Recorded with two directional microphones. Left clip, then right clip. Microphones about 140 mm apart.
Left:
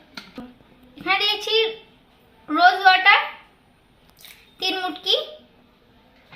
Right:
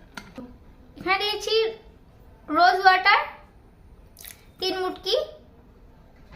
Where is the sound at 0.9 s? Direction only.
15° right (ahead or behind).